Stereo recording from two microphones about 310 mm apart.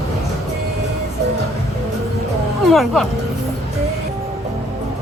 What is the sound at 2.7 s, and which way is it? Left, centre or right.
Speech, centre.